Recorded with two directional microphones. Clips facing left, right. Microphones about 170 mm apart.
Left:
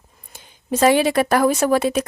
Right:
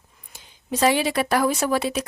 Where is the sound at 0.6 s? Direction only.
50° left (ahead or behind).